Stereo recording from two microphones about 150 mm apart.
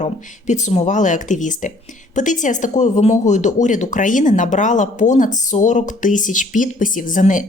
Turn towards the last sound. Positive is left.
turn(degrees=55)  # may be behind; listen again after turning